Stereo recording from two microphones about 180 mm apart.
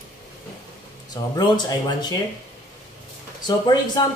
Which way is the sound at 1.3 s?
20° left (ahead or behind).